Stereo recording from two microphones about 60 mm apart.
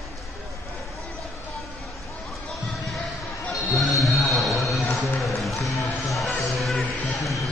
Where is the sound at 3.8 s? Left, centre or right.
Centre.